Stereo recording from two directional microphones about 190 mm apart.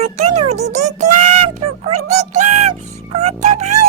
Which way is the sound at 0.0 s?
35° right (ahead or behind).